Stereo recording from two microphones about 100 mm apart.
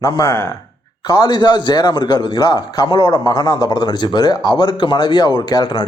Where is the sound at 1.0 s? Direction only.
40° left (ahead or behind).